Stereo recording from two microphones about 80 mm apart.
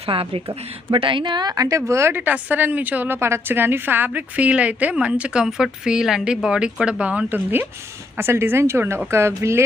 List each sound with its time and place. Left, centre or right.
0.1 s a woman's voice: right
3.2 s a woman's voice: right